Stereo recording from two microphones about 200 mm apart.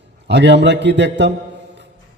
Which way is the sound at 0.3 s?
60° right (ahead or behind).